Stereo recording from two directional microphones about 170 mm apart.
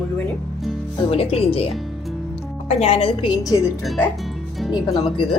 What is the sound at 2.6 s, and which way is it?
Speech, 35° left (ahead or behind).